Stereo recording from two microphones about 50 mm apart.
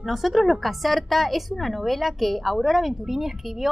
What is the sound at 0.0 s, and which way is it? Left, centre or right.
A child's voice, centre.